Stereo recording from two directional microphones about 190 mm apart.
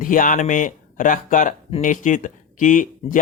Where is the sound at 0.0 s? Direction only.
45° left (ahead or behind).